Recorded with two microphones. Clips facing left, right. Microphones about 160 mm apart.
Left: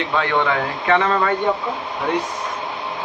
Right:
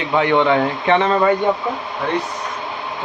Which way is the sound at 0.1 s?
20° right (ahead or behind).